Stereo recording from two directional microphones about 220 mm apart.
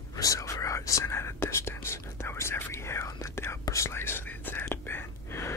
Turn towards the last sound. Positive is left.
turn(degrees=10)  # may be behind; listen again after turning